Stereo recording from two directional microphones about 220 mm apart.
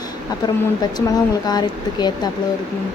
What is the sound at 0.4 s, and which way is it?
A woman's voice, 20° left (ahead or behind).